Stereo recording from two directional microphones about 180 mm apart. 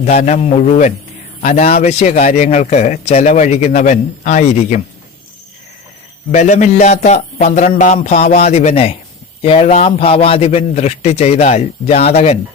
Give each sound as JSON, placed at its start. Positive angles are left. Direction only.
{"t": 0.0, "sound": "a man's voice", "side_deg": 40}
{"t": 6.3, "sound": "a man's voice", "side_deg": 40}